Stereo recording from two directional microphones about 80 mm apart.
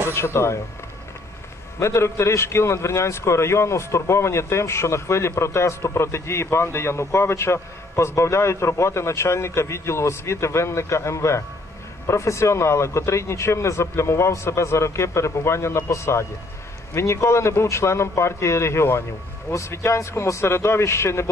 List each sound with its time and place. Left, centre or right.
0.1 s a man's voice: left
1.8 s a man's voice: left